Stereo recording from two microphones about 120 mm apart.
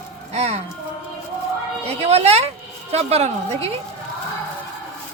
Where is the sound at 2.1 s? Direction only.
60° right (ahead or behind).